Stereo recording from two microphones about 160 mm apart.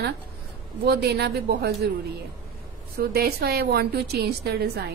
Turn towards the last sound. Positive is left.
turn(degrees=-90)